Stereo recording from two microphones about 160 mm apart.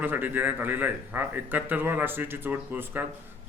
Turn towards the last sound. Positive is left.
turn(degrees=-10)  # may be behind; listen again after turning